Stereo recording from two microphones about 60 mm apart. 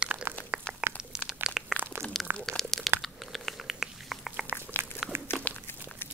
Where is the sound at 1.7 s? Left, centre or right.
Right.